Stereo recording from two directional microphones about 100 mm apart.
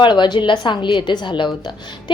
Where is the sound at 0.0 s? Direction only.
50° left (ahead or behind).